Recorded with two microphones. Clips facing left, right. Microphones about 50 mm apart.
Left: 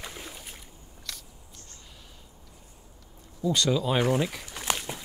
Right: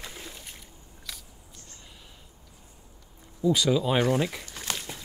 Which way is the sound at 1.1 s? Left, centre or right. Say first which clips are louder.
Left 1 dB; centre.